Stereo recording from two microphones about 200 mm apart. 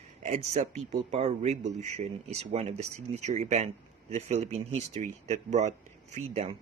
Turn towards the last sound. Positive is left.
turn(degrees=-35)  # may be behind; listen again after turning